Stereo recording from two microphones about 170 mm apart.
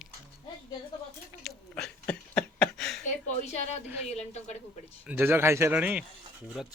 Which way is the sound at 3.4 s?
40° left (ahead or behind).